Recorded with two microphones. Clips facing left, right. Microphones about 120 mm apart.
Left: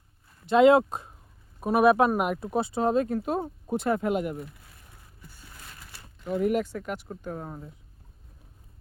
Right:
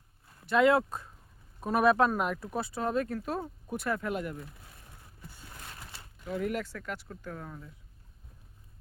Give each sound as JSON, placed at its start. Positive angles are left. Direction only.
{"t": 0.4, "sound": "speech", "side_deg": 20}
{"t": 1.6, "sound": "speech", "side_deg": 10}
{"t": 5.3, "sound": "crushing", "side_deg": -20}
{"t": 5.7, "sound": "a sound", "side_deg": -20}
{"t": 6.2, "sound": "speech", "side_deg": 20}